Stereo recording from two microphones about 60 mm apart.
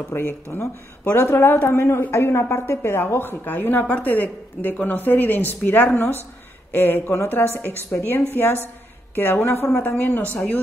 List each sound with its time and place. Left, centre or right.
0.1 s speech: left
7.9 s speech: left
9.9 s speech: left